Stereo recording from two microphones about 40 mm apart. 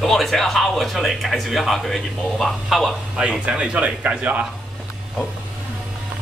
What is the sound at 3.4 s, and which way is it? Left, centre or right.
Speech, right.